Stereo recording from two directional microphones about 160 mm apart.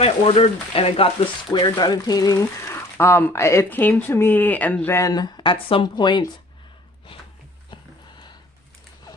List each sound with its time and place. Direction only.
0.0 s speech: 40° left (ahead or behind)
1.8 s speech: 25° left (ahead or behind)